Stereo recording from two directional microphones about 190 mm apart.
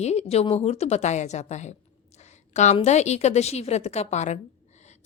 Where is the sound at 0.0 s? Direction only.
35° left (ahead or behind).